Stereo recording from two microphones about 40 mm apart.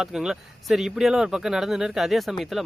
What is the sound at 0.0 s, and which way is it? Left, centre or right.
Speech, centre.